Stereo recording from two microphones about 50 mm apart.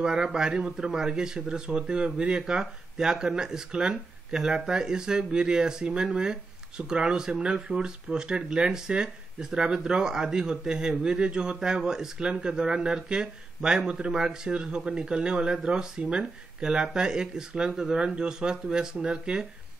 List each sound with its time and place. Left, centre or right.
0.0 s speech: centre